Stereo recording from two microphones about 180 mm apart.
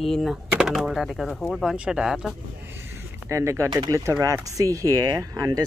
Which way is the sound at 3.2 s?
15° right (ahead or behind).